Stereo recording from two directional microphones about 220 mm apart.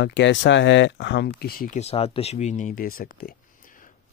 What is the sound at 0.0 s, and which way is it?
Speech, 55° left (ahead or behind).